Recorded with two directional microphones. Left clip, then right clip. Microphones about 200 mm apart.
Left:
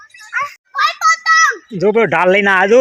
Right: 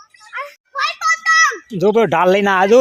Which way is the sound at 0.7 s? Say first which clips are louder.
Left 4 dB; 25° left (ahead or behind).